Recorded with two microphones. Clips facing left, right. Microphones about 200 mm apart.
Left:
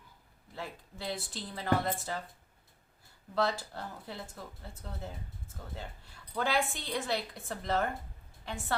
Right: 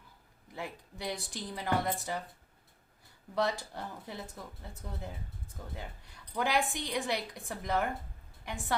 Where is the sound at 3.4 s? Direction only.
15° right (ahead or behind).